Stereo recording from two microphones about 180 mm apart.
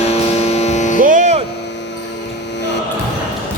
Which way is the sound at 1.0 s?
45° right (ahead or behind).